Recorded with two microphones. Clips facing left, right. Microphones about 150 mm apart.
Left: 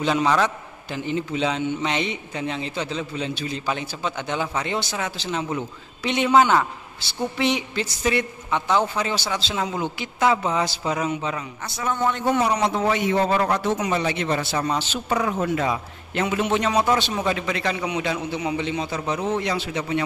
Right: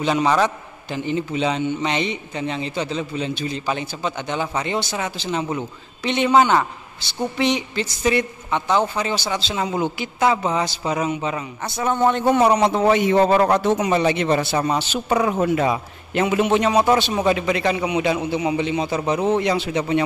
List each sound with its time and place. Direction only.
0.0 s a man's voice: 5° right (ahead or behind)
7.0 s a sound: 5° left (ahead or behind)
7.3 s a man's voice: 5° left (ahead or behind)
11.8 s a man's voice: 30° right (ahead or behind)
13.7 s a man's voice: 20° right (ahead or behind)